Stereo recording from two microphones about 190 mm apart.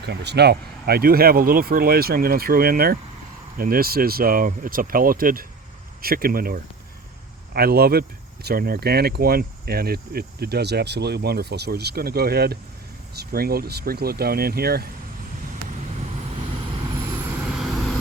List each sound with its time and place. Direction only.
0.0 s speech: 60° right (ahead or behind)